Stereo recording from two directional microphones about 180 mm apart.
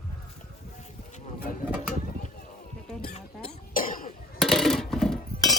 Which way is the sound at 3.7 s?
50° left (ahead or behind).